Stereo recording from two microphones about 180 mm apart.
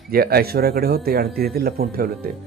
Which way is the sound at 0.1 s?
60° right (ahead or behind).